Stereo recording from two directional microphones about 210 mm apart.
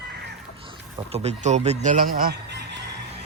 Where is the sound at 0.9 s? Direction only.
30° right (ahead or behind); by 2.8 s 55° right (ahead or behind).